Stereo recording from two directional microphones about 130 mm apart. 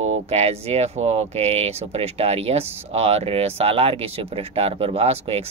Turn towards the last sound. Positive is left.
turn(degrees=-50)  # may be behind; listen again after turning